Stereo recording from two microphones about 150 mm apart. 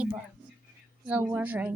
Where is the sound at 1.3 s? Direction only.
10° right (ahead or behind).